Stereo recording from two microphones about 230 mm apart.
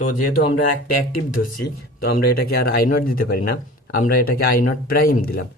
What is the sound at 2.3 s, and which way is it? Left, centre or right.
Speech, left.